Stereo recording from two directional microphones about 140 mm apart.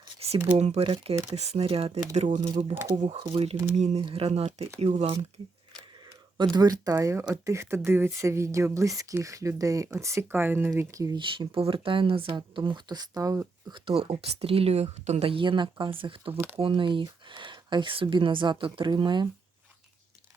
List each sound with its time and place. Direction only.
0.2 s a sound: 45° right (ahead or behind)
0.5 s speech: 50° right (ahead or behind)
2.1 s speech: 60° right (ahead or behind)
3.2 s speech: 45° right (ahead or behind)
6.3 s speech: 30° right (ahead or behind)
11.2 s speech: 35° right (ahead or behind)
13.7 s speech: 40° right (ahead or behind)